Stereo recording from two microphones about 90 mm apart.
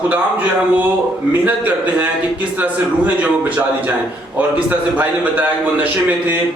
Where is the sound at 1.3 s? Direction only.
20° right (ahead or behind).